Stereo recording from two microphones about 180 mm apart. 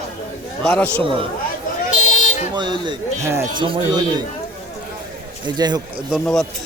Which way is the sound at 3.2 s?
15° right (ahead or behind).